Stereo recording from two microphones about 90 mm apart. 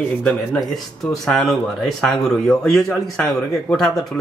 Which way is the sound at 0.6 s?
Centre (ahead or behind).